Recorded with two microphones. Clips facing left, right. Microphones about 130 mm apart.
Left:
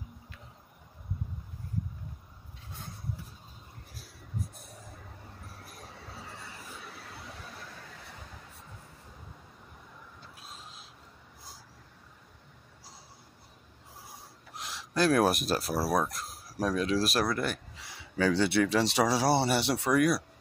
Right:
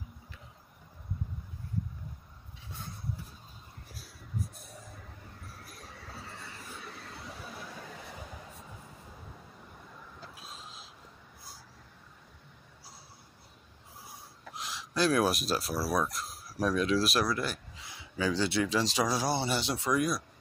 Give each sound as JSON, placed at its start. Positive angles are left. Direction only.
{"t": 6.8, "sound": "vehicle", "side_deg": 5}
{"t": 14.5, "sound": "speech", "side_deg": 55}